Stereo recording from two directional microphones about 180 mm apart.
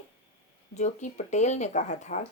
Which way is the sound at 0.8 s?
40° left (ahead or behind).